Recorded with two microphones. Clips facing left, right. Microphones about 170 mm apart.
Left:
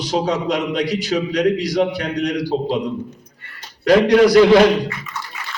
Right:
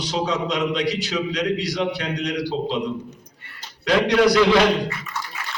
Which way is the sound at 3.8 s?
45° left (ahead or behind).